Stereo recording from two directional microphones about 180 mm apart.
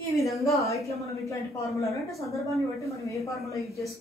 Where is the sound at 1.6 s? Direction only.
15° left (ahead or behind).